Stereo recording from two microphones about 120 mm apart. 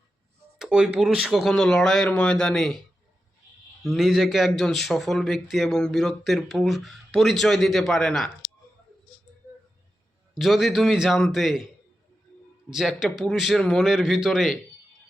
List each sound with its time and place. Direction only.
0.6 s a man's voice: 10° right (ahead or behind)
3.8 s a man's voice: centre (ahead or behind)
10.3 s a man's voice: centre (ahead or behind)
12.7 s a man's voice: centre (ahead or behind)